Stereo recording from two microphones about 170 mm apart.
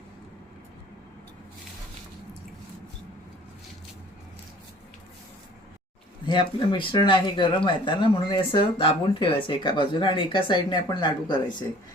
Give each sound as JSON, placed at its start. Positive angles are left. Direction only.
{"t": 6.2, "sound": "speech", "side_deg": 30}